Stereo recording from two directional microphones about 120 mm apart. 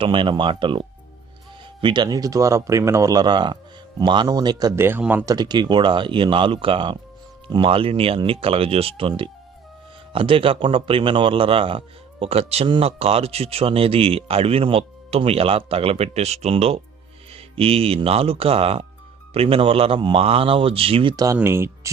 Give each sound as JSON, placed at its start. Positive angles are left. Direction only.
{"t": 0.0, "sound": "speech", "side_deg": -45}
{"t": 4.7, "sound": "speech", "side_deg": -20}
{"t": 5.2, "sound": "speech", "side_deg": -35}
{"t": 21.3, "sound": "speech", "side_deg": -20}